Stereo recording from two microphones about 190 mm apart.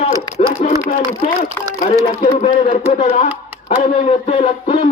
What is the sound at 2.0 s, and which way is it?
Speech, 40° left (ahead or behind).